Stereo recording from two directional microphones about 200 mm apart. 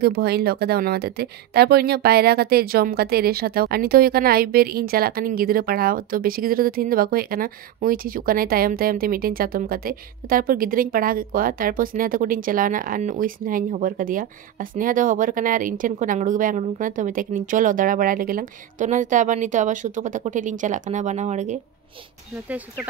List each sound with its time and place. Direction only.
0.0 s speech: 55° right (ahead or behind); by 21.5 s 35° right (ahead or behind)